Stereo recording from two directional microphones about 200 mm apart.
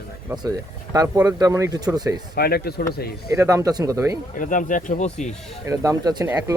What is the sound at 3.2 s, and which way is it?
Speech, 15° right (ahead or behind).